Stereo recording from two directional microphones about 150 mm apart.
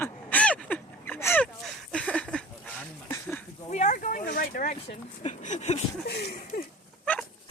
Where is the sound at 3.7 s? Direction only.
55° left (ahead or behind).